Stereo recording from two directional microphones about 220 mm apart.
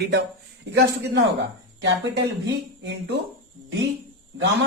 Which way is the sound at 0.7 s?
50° right (ahead or behind).